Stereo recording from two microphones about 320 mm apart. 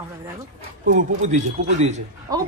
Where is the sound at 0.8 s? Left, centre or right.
Right.